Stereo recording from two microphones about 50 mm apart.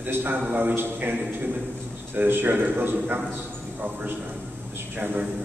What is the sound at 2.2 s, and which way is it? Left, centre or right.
A man's voice, right.